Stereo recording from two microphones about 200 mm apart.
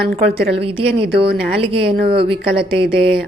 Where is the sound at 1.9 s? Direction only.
50° right (ahead or behind).